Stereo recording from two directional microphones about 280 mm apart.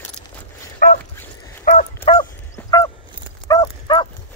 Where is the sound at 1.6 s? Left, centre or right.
Left.